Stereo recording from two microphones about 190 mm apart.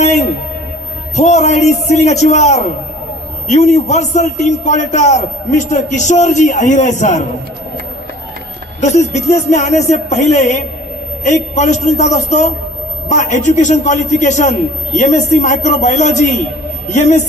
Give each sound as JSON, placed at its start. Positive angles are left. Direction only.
{"t": 1.1, "sound": "a man's voice", "side_deg": 35}
{"t": 8.8, "sound": "a man's voice", "side_deg": 40}